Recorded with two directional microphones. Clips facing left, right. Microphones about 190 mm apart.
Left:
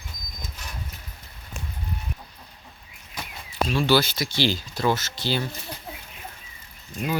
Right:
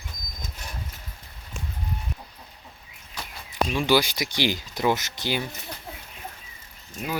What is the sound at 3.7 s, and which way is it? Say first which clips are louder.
Speech: left 1 dB; 15° right (ahead or behind).